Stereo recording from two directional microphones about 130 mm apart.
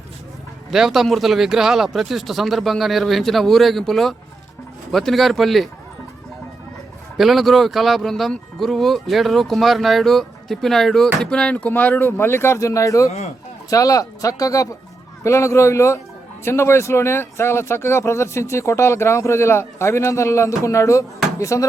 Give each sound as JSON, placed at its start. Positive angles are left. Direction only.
{"t": 0.7, "sound": "speech", "side_deg": 0}
{"t": 7.2, "sound": "speech", "side_deg": 0}
{"t": 13.1, "sound": "speech", "side_deg": 55}
{"t": 13.7, "sound": "speech", "side_deg": 25}